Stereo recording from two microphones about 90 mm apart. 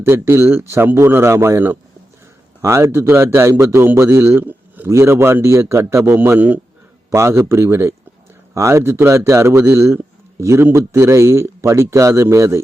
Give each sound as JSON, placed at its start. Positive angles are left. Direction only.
{"t": 0.0, "sound": "a man's voice", "side_deg": -30}
{"t": 6.1, "sound": "a man's voice", "side_deg": -20}
{"t": 7.1, "sound": "a man's voice", "side_deg": -30}